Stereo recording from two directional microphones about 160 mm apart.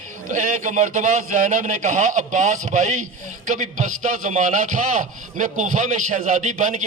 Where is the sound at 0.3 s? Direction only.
50° right (ahead or behind).